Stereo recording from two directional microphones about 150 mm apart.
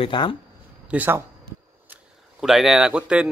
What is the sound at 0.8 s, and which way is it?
Speech, 10° right (ahead or behind).